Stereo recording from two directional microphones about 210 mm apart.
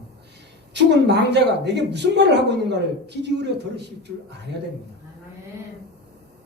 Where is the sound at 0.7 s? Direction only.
55° right (ahead or behind).